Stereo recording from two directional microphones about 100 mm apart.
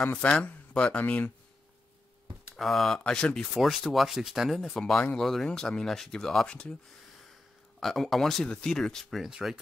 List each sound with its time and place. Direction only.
0.1 s speech: 15° left (ahead or behind)
2.5 s speech: centre (ahead or behind)
7.8 s speech: centre (ahead or behind)